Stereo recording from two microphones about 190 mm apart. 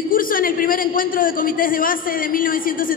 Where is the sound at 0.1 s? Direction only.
45° left (ahead or behind).